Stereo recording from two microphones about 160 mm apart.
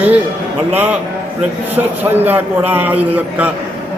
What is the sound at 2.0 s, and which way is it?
A man's voice, 10° right (ahead or behind).